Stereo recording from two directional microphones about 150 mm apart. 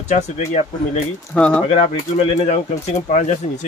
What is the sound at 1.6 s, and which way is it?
Speech, 45° left (ahead or behind).